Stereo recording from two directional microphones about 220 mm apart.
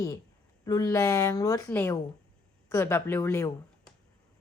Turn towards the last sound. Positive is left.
turn(degrees=15)  # may be behind; listen again after turning